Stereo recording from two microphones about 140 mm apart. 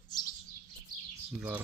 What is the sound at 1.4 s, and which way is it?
Speech, 10° right (ahead or behind).